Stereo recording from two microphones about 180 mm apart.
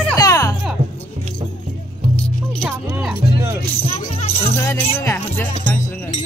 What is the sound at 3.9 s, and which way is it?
Music, 35° left (ahead or behind).